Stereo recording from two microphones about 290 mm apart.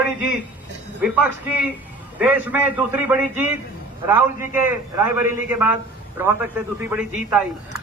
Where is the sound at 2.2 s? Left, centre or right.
Centre.